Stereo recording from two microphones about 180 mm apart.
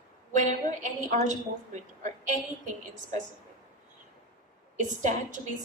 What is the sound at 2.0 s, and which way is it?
A woman's voice, 45° right (ahead or behind).